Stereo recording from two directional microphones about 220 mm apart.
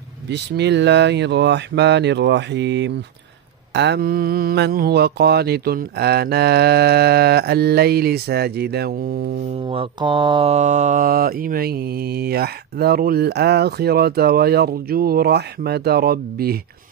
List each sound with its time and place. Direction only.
0.3 s mantra: 50° right (ahead or behind)
9.7 s mantra: 25° right (ahead or behind); by 16.5 s 45° right (ahead or behind)